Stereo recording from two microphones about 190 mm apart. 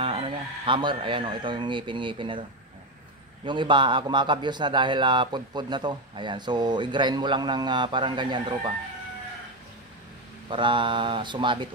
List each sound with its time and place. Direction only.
0.0 s speech: 30° right (ahead or behind)
3.4 s a man's voice: 25° right (ahead or behind)
10.5 s a man's voice: 25° right (ahead or behind)